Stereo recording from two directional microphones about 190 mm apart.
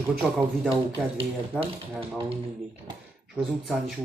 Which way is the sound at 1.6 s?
30° right (ahead or behind).